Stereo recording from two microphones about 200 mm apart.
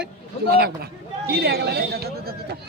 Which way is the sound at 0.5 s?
50° right (ahead or behind).